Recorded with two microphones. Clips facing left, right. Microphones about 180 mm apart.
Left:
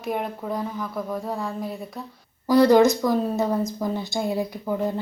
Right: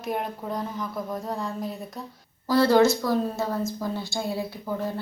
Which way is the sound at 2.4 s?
15° left (ahead or behind).